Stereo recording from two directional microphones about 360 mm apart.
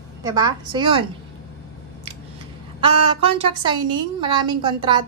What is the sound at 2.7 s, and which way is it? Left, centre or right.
A woman's voice, centre.